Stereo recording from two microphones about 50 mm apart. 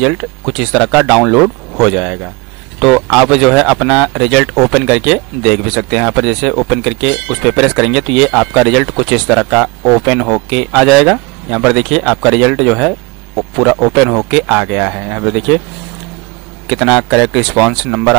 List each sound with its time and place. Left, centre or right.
0.0 s speech: centre
16.6 s speech: centre